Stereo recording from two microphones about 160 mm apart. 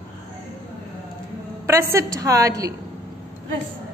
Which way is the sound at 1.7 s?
15° right (ahead or behind).